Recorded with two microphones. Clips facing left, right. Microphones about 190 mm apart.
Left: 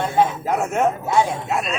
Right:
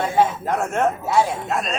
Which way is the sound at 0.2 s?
Centre (ahead or behind).